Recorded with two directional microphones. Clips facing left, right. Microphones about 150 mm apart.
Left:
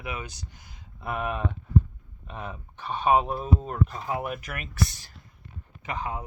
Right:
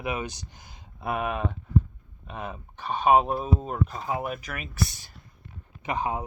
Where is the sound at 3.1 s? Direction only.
5° right (ahead or behind).